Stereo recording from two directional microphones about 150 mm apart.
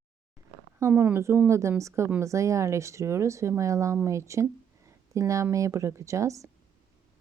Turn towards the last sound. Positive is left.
turn(degrees=-20)  # may be behind; listen again after turning